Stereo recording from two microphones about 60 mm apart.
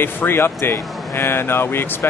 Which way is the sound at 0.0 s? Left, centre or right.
Left.